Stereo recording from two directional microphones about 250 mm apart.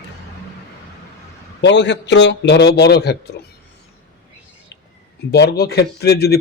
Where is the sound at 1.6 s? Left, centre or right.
Left.